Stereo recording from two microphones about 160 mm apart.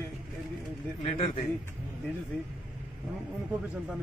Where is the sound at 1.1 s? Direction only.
35° left (ahead or behind).